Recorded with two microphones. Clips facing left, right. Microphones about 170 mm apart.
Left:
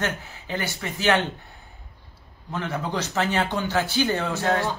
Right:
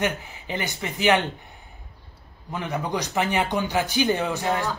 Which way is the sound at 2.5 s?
15° right (ahead or behind).